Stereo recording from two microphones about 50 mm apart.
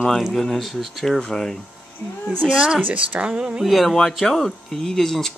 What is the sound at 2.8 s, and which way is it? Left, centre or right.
Speech, right.